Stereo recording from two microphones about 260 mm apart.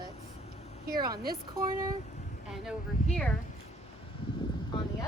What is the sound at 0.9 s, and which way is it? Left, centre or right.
Speech, centre.